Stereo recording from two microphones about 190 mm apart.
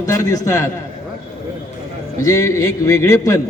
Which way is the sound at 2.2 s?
15° left (ahead or behind).